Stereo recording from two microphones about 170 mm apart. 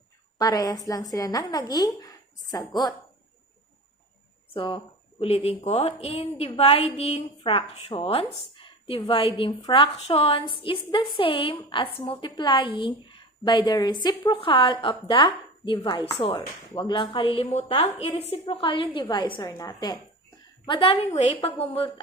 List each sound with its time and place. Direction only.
0.3 s a woman's voice: 20° left (ahead or behind)
4.5 s a woman's voice: 30° left (ahead or behind)
20.7 s a woman's voice: 30° left (ahead or behind)